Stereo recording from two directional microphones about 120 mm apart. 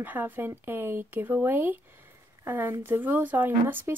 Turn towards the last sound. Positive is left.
turn(degrees=-20)  # may be behind; listen again after turning